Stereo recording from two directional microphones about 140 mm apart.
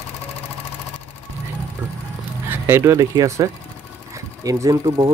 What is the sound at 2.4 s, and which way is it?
Speech, 20° right (ahead or behind).